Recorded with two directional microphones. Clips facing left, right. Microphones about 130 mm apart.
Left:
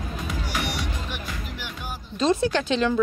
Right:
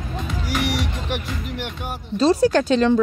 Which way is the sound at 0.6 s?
90° right.